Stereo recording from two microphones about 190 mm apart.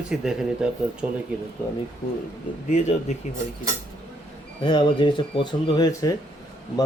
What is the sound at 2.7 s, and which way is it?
Speech, 40° left (ahead or behind).